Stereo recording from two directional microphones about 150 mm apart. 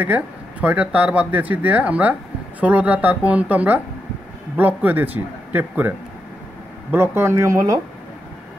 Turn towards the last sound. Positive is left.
turn(degrees=-20)  # may be behind; listen again after turning